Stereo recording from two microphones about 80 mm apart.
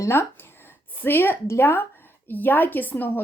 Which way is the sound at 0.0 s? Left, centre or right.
Left.